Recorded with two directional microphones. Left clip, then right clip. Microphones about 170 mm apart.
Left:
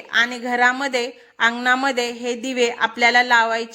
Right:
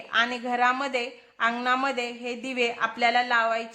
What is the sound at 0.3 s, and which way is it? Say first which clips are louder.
A woman's voice: left 6 dB; 20° left (ahead or behind).